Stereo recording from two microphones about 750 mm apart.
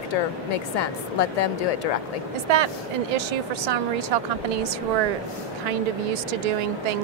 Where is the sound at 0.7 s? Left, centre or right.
Left.